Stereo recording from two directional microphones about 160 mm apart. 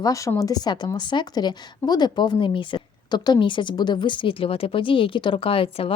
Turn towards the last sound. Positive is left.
turn(degrees=35)  # may be behind; listen again after turning